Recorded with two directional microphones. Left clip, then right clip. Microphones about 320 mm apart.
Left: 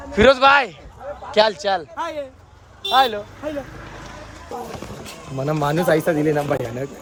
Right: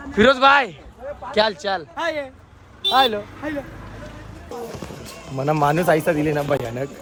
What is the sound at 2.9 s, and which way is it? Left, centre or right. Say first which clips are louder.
Speech: left 1 dB; centre.